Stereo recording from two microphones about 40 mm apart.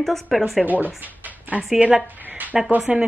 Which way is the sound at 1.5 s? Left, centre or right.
Right.